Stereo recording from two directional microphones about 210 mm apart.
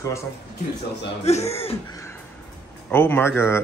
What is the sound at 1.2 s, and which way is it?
Speech, 30° left (ahead or behind).